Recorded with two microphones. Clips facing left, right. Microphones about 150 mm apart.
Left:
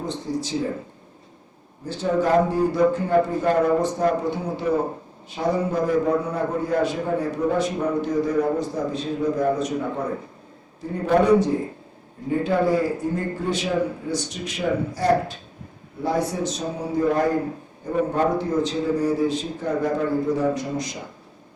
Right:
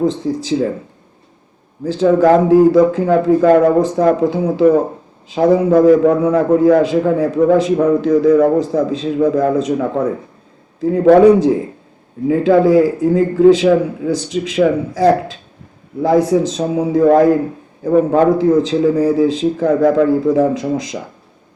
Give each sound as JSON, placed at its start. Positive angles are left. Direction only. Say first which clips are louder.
{"t": 0.2, "sound": "a man's voice", "louder": "right 7 dB", "side_deg": -90}
{"t": 1.9, "sound": "a man's voice", "louder": "right 10 dB", "side_deg": -90}